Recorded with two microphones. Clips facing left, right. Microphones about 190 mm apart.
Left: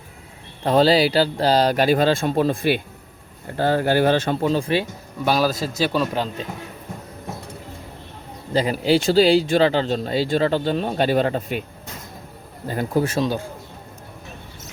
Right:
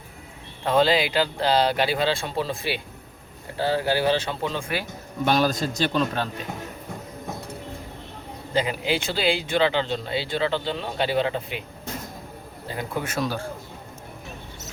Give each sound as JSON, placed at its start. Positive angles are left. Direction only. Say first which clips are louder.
{"t": 0.6, "sound": "speech", "louder": "left 4 dB", "side_deg": 40}
{"t": 5.2, "sound": "a man's voice", "louder": "left 1 dB", "side_deg": 5}
{"t": 8.5, "sound": "speech", "louder": "left 6 dB", "side_deg": 40}
{"t": 12.6, "sound": "a man's voice", "louder": "left 8 dB", "side_deg": 45}